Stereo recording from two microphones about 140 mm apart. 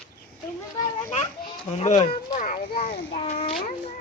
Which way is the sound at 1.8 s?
50° left (ahead or behind).